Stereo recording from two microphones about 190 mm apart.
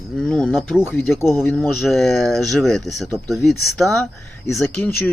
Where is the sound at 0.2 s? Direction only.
5° left (ahead or behind).